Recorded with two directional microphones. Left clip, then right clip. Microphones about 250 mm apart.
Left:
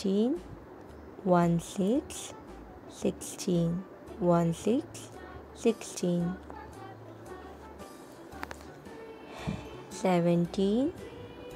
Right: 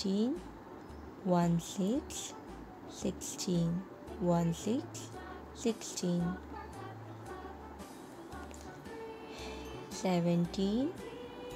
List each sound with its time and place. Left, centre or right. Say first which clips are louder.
0.0 s speech: left 6 dB; centre
9.4 s music: left 6 dB; centre
10.5 s speech: left 6 dB; centre